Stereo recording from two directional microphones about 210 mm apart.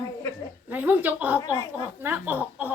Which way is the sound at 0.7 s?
10° right (ahead or behind).